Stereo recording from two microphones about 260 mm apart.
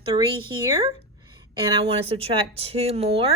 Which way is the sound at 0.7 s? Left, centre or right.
Centre.